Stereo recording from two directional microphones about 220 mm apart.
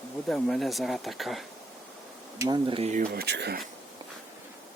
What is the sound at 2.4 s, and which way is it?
Speech, 20° right (ahead or behind).